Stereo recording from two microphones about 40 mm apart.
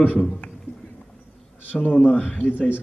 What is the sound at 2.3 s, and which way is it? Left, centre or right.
Speech, left.